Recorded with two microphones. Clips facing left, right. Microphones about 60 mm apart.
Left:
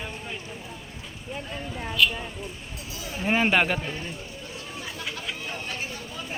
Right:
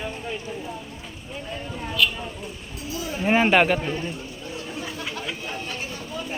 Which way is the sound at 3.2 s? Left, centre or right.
Centre.